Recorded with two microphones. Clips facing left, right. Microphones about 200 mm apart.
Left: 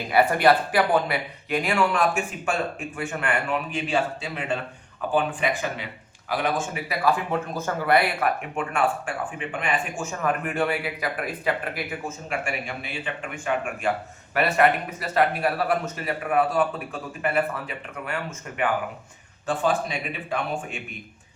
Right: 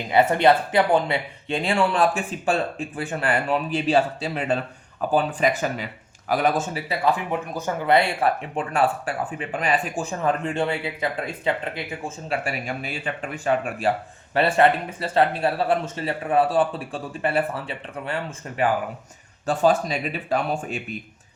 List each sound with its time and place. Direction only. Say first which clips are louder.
0.1 s speech: right 2 dB; 25° right (ahead or behind); by 6.8 s 40° right (ahead or behind)
6.8 s speech: left 1 dB; 20° right (ahead or behind); by 20.8 s 35° right (ahead or behind)